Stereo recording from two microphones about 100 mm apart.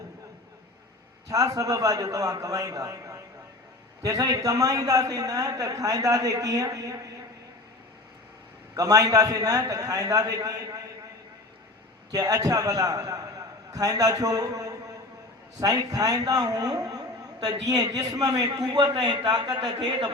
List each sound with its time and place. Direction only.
1.3 s a man's voice: 35° right (ahead or behind)
8.7 s a man's voice: 35° right (ahead or behind)
12.1 s a man's voice: 40° right (ahead or behind)